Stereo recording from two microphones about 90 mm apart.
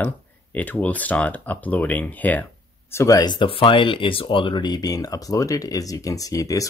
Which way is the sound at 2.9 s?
35° left (ahead or behind).